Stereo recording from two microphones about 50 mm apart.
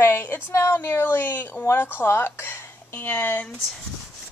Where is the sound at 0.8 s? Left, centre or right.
Left.